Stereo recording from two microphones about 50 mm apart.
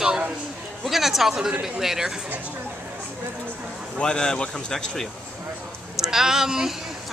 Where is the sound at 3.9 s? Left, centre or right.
Centre.